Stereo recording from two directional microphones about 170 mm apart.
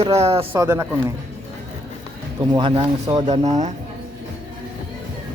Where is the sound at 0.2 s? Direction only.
35° right (ahead or behind).